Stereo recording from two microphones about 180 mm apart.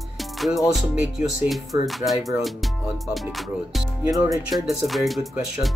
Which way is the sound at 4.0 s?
20° right (ahead or behind).